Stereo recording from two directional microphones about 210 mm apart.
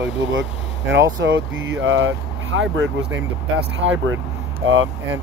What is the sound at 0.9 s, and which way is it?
Speech, 60° right (ahead or behind).